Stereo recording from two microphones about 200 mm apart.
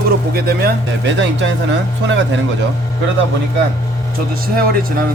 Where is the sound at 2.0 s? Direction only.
65° right (ahead or behind).